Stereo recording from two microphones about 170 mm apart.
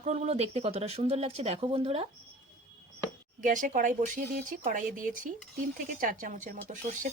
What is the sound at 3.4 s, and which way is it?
Speech, 50° right (ahead or behind).